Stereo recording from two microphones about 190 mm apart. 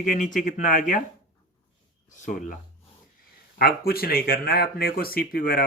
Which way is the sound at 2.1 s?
40° left (ahead or behind).